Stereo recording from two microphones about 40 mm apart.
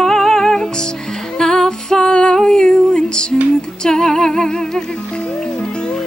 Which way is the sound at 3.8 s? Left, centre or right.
Centre.